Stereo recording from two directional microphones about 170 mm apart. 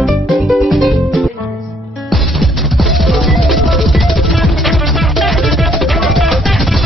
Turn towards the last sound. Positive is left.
turn(degrees=0)  # may be behind; listen again after turning